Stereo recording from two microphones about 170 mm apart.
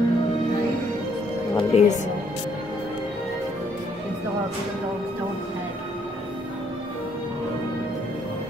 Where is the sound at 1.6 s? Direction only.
40° left (ahead or behind).